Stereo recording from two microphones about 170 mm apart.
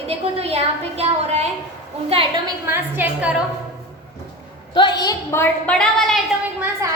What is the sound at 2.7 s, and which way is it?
Speech, 10° right (ahead or behind).